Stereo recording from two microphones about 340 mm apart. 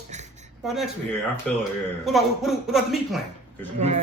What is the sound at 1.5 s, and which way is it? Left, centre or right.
A man's voice, centre.